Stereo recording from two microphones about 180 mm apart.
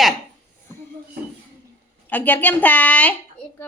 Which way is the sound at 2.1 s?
10° left (ahead or behind).